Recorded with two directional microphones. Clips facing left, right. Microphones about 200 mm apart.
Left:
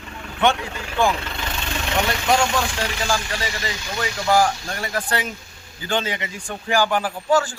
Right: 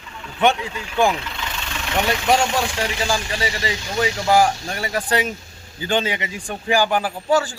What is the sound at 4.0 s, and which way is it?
Speech, 20° right (ahead or behind).